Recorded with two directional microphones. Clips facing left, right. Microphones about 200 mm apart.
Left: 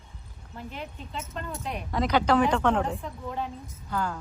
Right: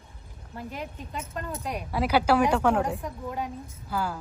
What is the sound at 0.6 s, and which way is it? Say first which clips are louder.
A woman's voice: right 2 dB; 10° right (ahead or behind).